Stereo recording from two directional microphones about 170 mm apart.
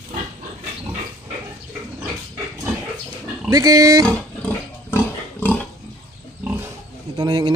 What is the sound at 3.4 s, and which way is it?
Speech, 20° right (ahead or behind).